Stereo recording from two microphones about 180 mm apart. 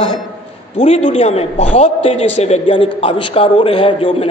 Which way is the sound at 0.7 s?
35° left (ahead or behind).